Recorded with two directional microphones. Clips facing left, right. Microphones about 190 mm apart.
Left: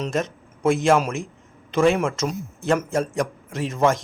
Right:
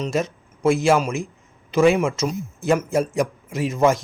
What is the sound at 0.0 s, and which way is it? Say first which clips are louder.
A man's voice: right 2 dB; 5° right (ahead or behind).